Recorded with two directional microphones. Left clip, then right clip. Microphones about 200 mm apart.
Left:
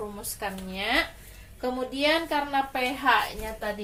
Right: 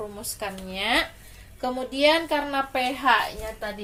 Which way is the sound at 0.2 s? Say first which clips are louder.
Right 1 dB; 50° right (ahead or behind).